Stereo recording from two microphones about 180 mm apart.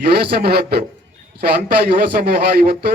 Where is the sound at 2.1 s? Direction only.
55° right (ahead or behind).